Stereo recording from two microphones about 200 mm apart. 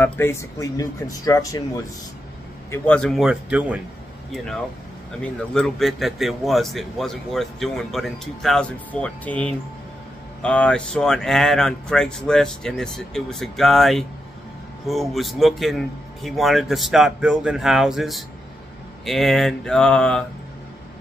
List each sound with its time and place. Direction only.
0.0 s speech: 10° left (ahead or behind)
2.7 s speech: 5° left (ahead or behind)
5.2 s speech: 5° left (ahead or behind)